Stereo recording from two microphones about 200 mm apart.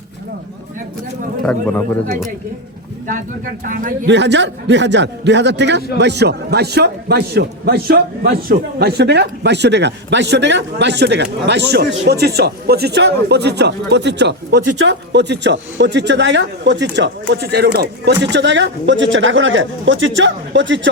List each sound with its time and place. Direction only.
1.4 s speech: 5° left (ahead or behind)
4.0 s a man's voice: 60° right (ahead or behind)